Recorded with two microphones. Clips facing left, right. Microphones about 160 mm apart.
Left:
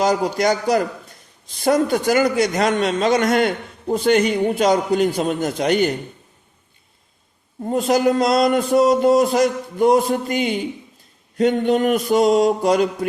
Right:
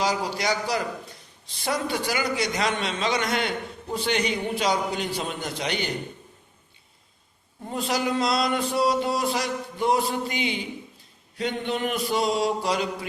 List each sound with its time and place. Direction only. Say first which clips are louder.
0.0 s a man's voice: left 8 dB; 45° left (ahead or behind)
7.6 s a man's voice: left 10 dB; 45° left (ahead or behind)